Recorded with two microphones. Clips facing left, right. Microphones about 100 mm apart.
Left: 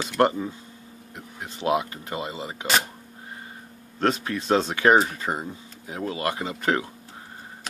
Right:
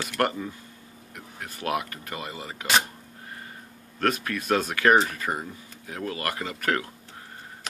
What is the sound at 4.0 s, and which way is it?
Speech, 25° left (ahead or behind).